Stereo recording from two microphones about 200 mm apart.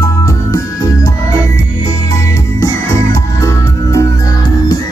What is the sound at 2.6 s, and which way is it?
Music, 15° left (ahead or behind).